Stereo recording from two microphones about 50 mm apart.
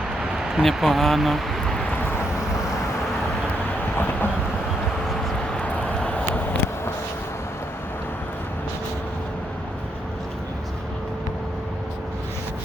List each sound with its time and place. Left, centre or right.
0.2 s a sound: centre
0.6 s speech: centre
3.9 s train: left
5.6 s vehicle: left